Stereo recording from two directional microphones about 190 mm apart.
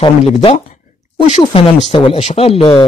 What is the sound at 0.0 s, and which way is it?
Speech, 25° left (ahead or behind).